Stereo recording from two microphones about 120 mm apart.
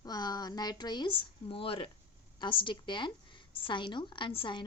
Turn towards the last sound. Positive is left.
turn(degrees=45)  # may be behind; listen again after turning